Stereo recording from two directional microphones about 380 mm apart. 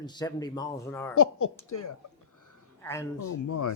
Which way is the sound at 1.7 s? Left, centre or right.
Left.